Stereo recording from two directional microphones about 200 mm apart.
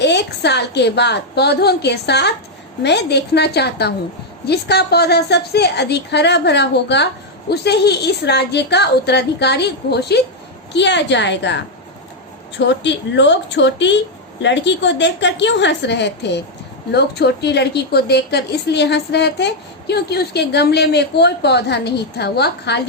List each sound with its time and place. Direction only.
0.0 s a woman's voice: 60° left (ahead or behind)